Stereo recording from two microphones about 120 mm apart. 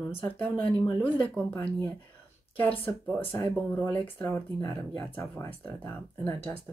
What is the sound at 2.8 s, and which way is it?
Speech, 15° left (ahead or behind).